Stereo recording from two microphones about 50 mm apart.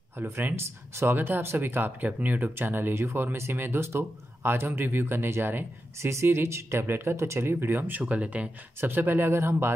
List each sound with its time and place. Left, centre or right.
0.2 s speech: right
0.6 s speech: right
1.1 s speech: right
2.9 s speech: right
4.6 s speech: right
6.2 s speech: right
8.0 s speech: right
8.8 s speech: right